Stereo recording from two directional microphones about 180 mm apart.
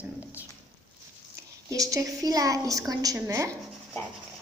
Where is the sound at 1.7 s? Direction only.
20° right (ahead or behind).